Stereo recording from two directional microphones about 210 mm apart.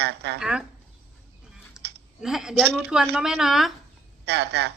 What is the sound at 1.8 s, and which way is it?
Clicking, 5° right (ahead or behind).